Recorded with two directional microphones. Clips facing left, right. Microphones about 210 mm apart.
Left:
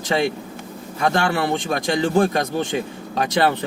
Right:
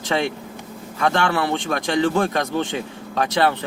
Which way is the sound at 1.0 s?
40° left (ahead or behind).